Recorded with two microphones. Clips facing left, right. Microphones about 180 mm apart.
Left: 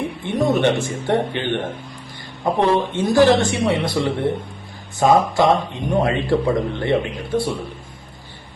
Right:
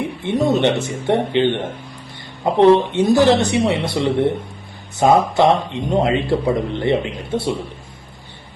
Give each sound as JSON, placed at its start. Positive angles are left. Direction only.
{"t": 0.3, "sound": "speech", "side_deg": -20}